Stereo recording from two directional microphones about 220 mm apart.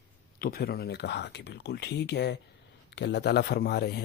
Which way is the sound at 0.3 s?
45° left (ahead or behind).